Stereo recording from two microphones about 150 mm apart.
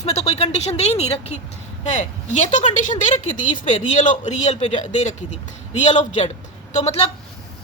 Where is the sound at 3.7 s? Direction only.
50° left (ahead or behind).